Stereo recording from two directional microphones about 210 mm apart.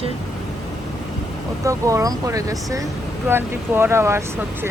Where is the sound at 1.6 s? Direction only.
15° right (ahead or behind).